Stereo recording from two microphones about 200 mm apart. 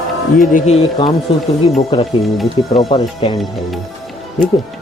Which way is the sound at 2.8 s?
25° left (ahead or behind).